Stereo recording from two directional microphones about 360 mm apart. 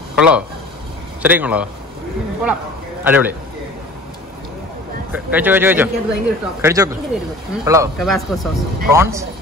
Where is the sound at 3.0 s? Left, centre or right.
Centre.